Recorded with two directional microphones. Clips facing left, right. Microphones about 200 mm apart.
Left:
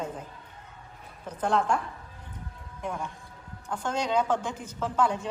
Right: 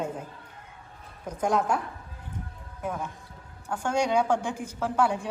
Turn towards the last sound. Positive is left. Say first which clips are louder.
# right 1 dB
turn(degrees=-10)  # may be behind; listen again after turning